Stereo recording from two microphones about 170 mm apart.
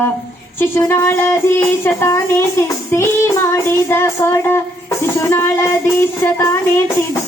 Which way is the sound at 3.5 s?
15° left (ahead or behind).